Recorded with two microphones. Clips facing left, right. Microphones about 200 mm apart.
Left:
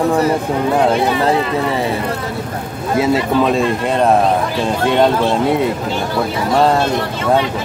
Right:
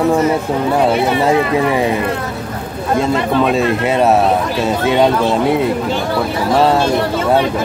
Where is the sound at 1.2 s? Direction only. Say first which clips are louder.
Right 2 dB; 15° right (ahead or behind).